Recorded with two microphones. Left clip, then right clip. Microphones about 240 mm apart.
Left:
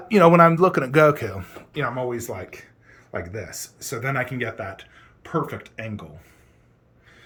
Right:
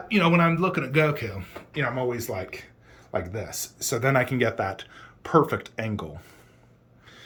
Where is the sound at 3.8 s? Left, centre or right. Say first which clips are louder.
Right 3 dB; centre.